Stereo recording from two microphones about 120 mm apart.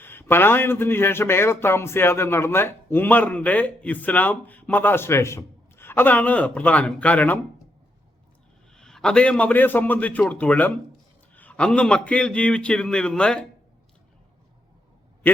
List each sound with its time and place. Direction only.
0.0 s a man's voice: 20° left (ahead or behind)
8.7 s a man's voice: 5° left (ahead or behind)